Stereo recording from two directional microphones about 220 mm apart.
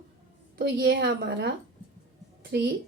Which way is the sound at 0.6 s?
50° right (ahead or behind).